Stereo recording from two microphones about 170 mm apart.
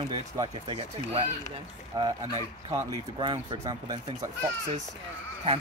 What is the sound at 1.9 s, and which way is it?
Speech, 25° right (ahead or behind).